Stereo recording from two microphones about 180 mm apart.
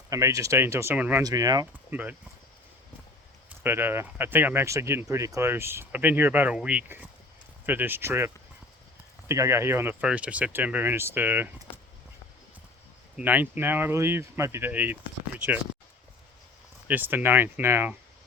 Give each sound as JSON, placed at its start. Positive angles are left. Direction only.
{"t": 0.1, "sound": "speech", "side_deg": -15}
{"t": 1.2, "sound": "speech", "side_deg": -20}
{"t": 1.9, "sound": "speech", "side_deg": -10}
{"t": 3.6, "sound": "speech", "side_deg": -10}
{"t": 13.1, "sound": "speech", "side_deg": -10}
{"t": 16.9, "sound": "speech", "side_deg": -10}